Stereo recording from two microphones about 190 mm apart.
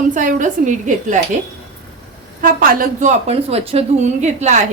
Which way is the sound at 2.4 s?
50° right (ahead or behind).